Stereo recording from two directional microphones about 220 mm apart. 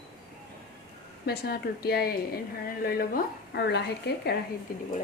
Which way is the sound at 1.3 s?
45° left (ahead or behind).